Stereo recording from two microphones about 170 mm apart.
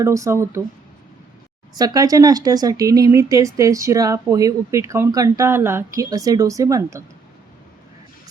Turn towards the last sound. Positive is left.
turn(degrees=-15)  # may be behind; listen again after turning